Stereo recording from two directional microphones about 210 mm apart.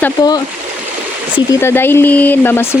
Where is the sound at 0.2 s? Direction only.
20° left (ahead or behind).